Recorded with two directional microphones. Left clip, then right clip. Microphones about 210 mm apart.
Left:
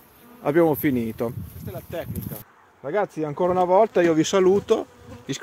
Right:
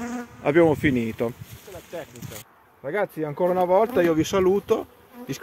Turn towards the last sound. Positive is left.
turn(degrees=15)  # may be behind; listen again after turning